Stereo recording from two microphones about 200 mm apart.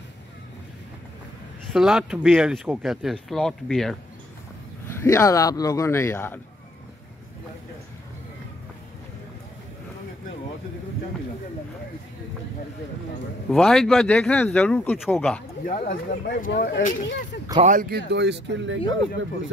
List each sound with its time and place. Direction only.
1.7 s speech: 5° right (ahead or behind)
4.8 s speech: 10° left (ahead or behind)
13.5 s speech: centre (ahead or behind)
15.7 s speech: 45° left (ahead or behind)
17.6 s speech: 45° right (ahead or behind); by 18.8 s 65° right (ahead or behind)